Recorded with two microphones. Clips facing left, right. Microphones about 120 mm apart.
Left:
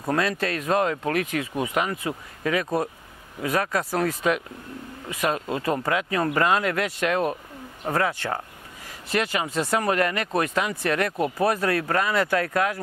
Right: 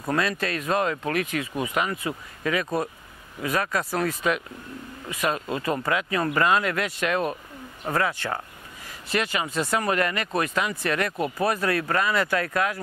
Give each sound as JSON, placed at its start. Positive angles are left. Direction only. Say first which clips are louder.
{"t": 0.1, "sound": "speech", "louder": "left 1 dB", "side_deg": 45}